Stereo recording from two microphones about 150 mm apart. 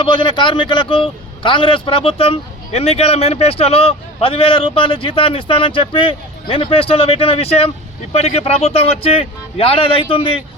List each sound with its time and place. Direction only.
0.0 s a man's voice: 30° left (ahead or behind)